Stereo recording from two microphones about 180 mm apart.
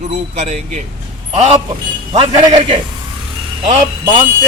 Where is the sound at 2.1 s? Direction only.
25° right (ahead or behind).